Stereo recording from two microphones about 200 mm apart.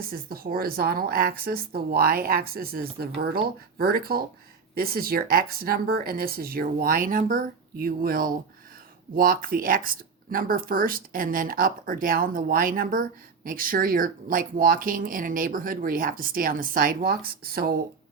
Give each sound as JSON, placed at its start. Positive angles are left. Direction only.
{"t": 0.0, "sound": "speech", "side_deg": -45}